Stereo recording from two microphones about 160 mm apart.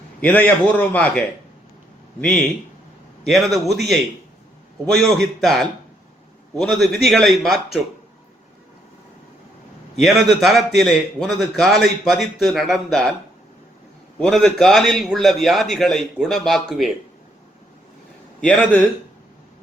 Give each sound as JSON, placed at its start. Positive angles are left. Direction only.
{"t": 0.2, "sound": "a man's voice", "side_deg": 10}
{"t": 2.2, "sound": "a man's voice", "side_deg": 5}
{"t": 10.0, "sound": "a man's voice", "side_deg": 0}
{"t": 14.2, "sound": "a man's voice", "side_deg": 5}
{"t": 18.3, "sound": "a man's voice", "side_deg": 10}